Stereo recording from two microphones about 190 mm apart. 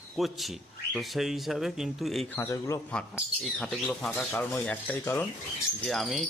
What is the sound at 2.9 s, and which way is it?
Speech, 5° left (ahead or behind).